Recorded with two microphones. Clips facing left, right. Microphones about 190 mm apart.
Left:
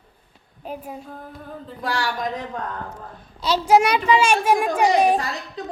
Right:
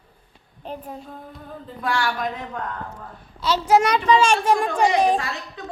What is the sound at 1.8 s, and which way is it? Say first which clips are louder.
Speech: right 1 dB; 35° left (ahead or behind).